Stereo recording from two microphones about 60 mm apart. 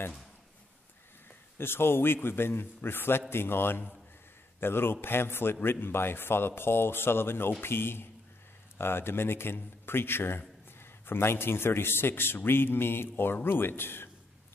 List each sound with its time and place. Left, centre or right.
1.6 s a man's voice: left